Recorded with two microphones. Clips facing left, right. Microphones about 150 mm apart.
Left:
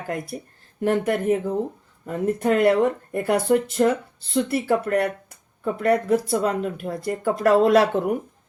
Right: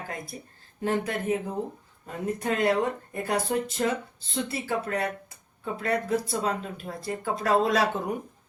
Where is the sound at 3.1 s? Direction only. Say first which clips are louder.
Left 7 dB; 70° left (ahead or behind).